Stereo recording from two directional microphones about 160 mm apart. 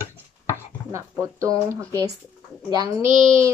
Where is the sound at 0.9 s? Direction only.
20° right (ahead or behind).